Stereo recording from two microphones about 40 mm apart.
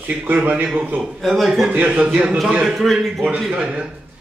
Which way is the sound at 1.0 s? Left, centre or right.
Centre.